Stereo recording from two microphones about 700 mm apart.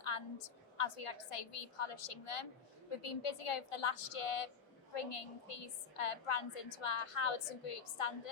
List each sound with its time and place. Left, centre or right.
0.0 s a woman's voice: left